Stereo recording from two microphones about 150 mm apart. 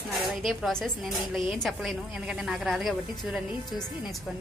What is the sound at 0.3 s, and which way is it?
A woman's voice, centre (ahead or behind).